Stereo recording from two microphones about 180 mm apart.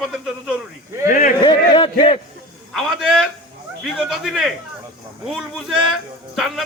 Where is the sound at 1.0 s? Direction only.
45° left (ahead or behind).